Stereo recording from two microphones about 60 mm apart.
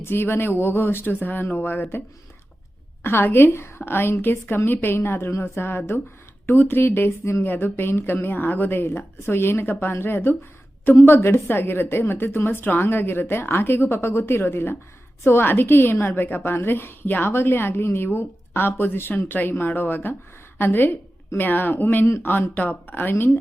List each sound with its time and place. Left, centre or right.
0.0 s a woman's voice: left
3.0 s a woman's voice: left